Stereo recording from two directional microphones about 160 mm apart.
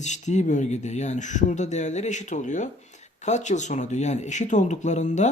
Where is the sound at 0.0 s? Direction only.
45° left (ahead or behind).